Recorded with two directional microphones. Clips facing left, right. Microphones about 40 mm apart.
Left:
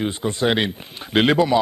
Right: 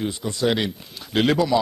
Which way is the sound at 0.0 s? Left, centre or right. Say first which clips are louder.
Left 2 dB; left.